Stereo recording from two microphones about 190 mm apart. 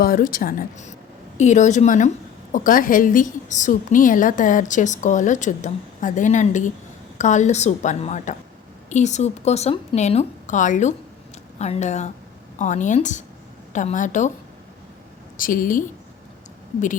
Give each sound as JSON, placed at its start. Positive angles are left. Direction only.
{"t": 0.0, "sound": "a woman's voice", "side_deg": 50}
{"t": 15.4, "sound": "a woman's voice", "side_deg": 45}